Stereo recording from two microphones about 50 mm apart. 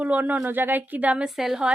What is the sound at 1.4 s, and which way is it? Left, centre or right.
Speech, centre.